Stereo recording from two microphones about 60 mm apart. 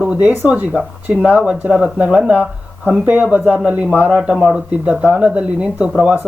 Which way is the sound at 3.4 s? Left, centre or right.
Centre.